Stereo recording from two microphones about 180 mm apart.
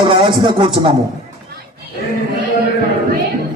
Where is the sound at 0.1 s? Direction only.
30° right (ahead or behind).